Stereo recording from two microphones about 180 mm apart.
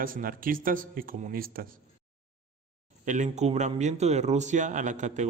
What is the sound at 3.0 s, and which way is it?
A man's voice, 40° right (ahead or behind).